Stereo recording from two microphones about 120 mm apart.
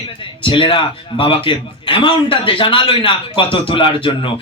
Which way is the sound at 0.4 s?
45° left (ahead or behind).